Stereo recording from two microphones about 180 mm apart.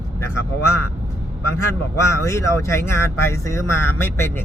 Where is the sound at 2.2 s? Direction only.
15° left (ahead or behind).